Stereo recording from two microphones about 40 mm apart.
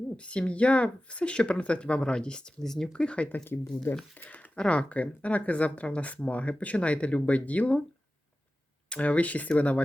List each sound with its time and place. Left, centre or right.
0.2 s speech: left
2.6 s speech: centre
2.9 s speech: left
3.2 s speech: left
4.2 s speech: left
4.5 s speech: left
8.9 s speech: left